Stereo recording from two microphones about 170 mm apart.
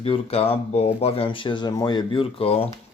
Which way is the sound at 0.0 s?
35° left (ahead or behind).